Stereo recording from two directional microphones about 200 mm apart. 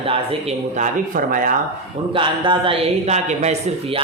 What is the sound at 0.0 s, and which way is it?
Speech, 30° right (ahead or behind).